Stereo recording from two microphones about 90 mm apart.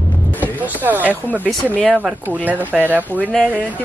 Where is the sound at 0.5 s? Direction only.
20° right (ahead or behind).